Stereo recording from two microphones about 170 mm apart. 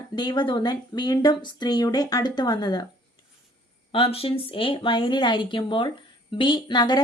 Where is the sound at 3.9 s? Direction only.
35° left (ahead or behind).